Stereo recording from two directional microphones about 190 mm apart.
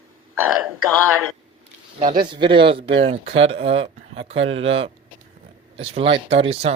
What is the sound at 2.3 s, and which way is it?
Speech, 25° right (ahead or behind).